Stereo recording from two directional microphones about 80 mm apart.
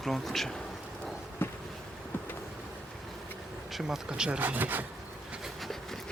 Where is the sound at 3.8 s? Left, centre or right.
Centre.